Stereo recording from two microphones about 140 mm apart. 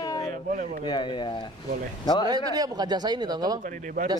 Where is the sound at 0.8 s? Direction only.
35° left (ahead or behind).